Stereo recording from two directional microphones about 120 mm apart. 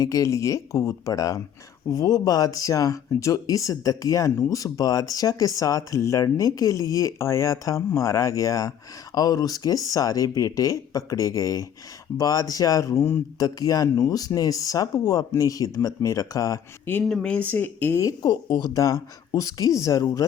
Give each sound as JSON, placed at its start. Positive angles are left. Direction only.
{"t": 0.0, "sound": "speech", "side_deg": 25}
{"t": 17.1, "sound": "speech", "side_deg": 10}
{"t": 18.0, "sound": "speech", "side_deg": 30}